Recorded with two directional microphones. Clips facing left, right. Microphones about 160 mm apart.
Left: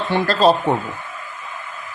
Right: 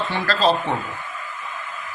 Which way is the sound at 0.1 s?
60° left (ahead or behind).